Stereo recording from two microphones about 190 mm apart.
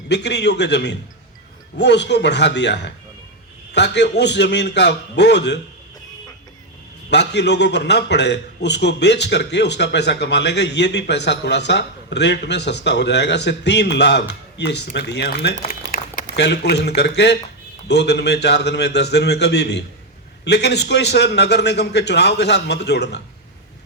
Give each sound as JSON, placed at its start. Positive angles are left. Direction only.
{"t": 0.1, "sound": "a man's voice", "side_deg": 65}
{"t": 7.1, "sound": "a man's voice", "side_deg": 65}
{"t": 15.6, "sound": "a sound", "side_deg": 45}
{"t": 16.3, "sound": "a man's voice", "side_deg": 60}